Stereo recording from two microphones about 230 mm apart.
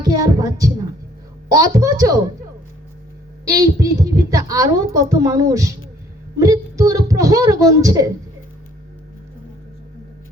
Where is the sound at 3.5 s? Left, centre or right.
Centre.